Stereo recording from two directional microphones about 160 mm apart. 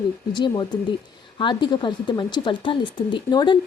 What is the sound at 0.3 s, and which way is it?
A woman's voice, 30° left (ahead or behind).